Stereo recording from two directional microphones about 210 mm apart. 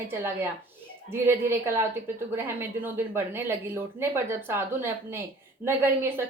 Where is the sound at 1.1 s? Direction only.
10° right (ahead or behind).